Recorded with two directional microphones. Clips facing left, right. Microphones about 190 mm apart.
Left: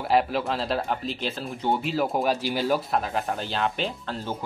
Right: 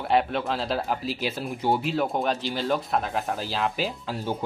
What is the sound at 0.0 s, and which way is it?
Speech, centre (ahead or behind).